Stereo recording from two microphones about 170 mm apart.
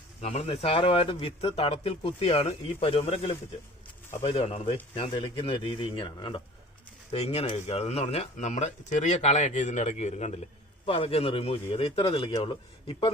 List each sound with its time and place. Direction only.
0.2 s speech: 40° left (ahead or behind)